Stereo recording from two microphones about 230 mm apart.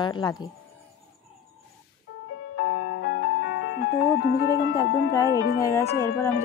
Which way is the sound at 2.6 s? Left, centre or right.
Left.